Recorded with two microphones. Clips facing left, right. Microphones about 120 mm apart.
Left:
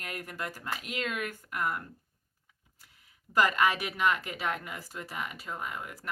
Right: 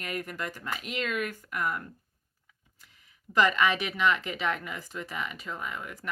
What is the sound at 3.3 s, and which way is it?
Speech, 45° left (ahead or behind).